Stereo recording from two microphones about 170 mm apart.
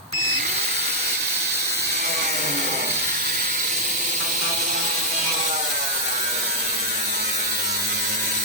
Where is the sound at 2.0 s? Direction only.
60° right (ahead or behind).